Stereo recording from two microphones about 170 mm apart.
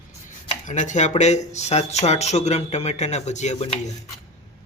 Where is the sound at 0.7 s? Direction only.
45° left (ahead or behind).